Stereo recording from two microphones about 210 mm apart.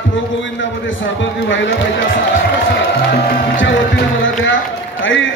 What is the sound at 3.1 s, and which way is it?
Speech, 50° left (ahead or behind).